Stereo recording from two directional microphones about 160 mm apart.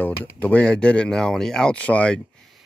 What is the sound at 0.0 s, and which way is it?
Speech, 10° left (ahead or behind).